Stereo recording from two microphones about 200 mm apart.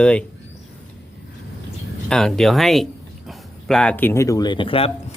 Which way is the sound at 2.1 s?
5° left (ahead or behind).